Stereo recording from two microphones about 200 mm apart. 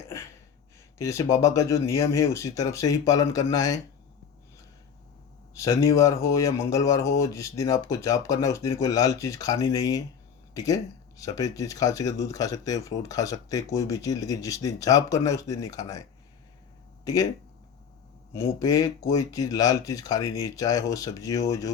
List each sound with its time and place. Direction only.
0.9 s speech: 15° left (ahead or behind)
5.5 s speech: 15° left (ahead or behind)
18.4 s speech: 15° left (ahead or behind)